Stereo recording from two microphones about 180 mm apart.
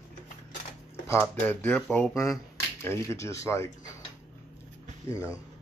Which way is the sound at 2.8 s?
15° left (ahead or behind).